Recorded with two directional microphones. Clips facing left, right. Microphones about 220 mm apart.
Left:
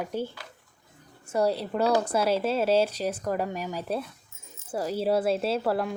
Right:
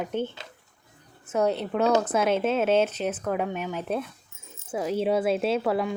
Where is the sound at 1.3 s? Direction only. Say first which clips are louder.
Right 1 dB; 10° left (ahead or behind).